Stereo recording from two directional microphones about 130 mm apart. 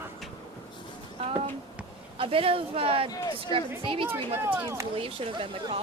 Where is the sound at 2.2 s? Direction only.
45° right (ahead or behind).